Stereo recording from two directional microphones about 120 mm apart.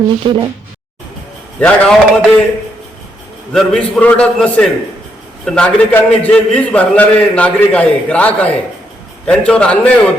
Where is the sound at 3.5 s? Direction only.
5° left (ahead or behind).